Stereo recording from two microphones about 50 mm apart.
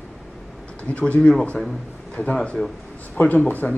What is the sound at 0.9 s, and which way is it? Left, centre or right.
Speech, left.